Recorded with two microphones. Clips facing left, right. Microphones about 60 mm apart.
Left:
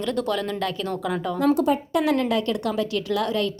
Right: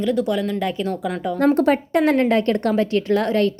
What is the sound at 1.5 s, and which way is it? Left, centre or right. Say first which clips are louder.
Speech: right 4 dB; right.